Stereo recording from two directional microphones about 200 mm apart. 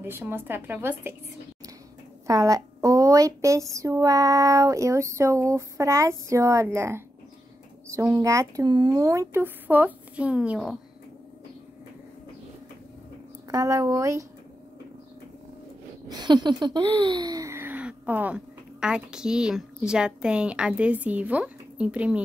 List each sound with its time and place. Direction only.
0.0 s speech: 10° right (ahead or behind)
2.2 s speech: 15° right (ahead or behind)
13.5 s speech: 15° right (ahead or behind)
16.1 s speech: 20° right (ahead or behind)